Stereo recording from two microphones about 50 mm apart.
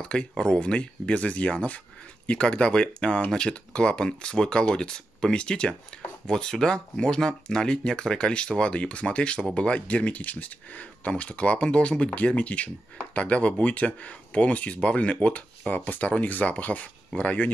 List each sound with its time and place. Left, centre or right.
0.0 s speech: centre